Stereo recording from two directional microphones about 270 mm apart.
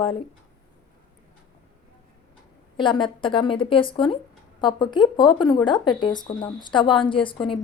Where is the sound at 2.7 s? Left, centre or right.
Centre.